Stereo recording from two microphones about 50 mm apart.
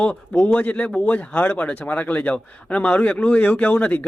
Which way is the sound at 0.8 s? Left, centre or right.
Centre.